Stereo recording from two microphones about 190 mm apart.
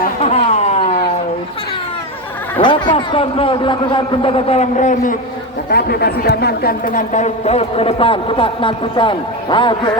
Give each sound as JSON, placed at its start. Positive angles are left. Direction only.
{"t": 0.2, "sound": "a sound", "side_deg": 35}
{"t": 2.6, "sound": "a man's voice", "side_deg": 25}
{"t": 5.7, "sound": "speech", "side_deg": 55}